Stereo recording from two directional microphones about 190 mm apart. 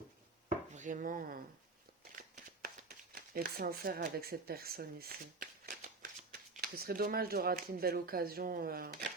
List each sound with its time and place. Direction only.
0.4 s chopping: 40° right (ahead or behind)
3.2 s speech: 50° right (ahead or behind)